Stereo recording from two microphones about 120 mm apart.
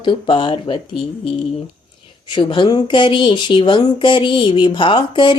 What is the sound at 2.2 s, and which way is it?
A woman's voice, 40° left (ahead or behind).